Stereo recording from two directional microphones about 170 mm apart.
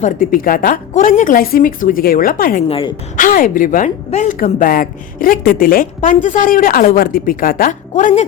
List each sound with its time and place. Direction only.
0.0 s a woman's voice: 55° left (ahead or behind)
2.6 s a woman's voice: 35° left (ahead or behind)
3.2 s a woman's voice: 55° left (ahead or behind)